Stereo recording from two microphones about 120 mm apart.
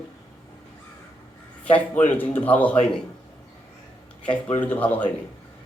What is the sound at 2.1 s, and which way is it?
Speech, 15° left (ahead or behind).